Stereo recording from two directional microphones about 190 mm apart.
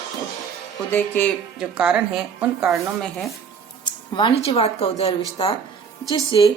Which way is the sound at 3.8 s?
25° left (ahead or behind).